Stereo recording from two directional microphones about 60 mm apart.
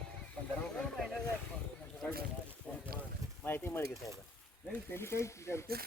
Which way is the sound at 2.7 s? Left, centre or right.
Left.